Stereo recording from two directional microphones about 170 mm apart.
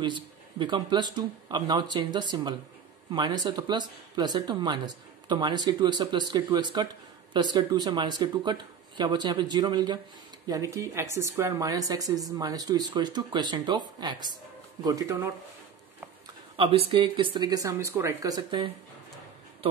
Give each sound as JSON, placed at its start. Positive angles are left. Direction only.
{"t": 0.0, "sound": "speech", "side_deg": -25}
{"t": 16.5, "sound": "speech", "side_deg": -35}